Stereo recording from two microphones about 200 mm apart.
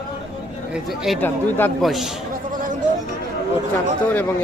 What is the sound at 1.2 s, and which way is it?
Speech, 10° left (ahead or behind).